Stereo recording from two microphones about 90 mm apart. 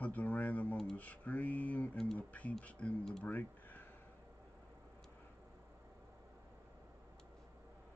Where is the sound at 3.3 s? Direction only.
20° left (ahead or behind).